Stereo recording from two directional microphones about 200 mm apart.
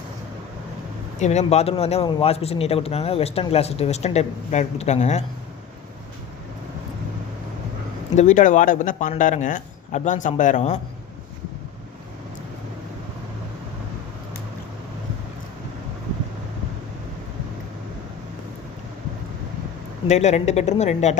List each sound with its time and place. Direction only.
1.2 s speech: 35° left (ahead or behind)
8.1 s speech: 35° left (ahead or behind)
20.1 s speech: 35° left (ahead or behind)